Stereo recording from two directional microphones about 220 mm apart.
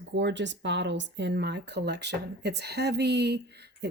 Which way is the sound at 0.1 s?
50° right (ahead or behind).